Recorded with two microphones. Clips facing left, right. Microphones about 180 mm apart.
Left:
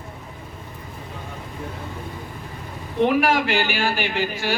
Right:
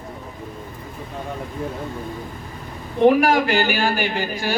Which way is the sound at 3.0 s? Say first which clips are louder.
Right 4 dB; 45° right (ahead or behind).